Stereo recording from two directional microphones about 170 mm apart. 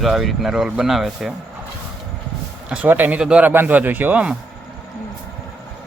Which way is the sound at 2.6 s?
10° right (ahead or behind).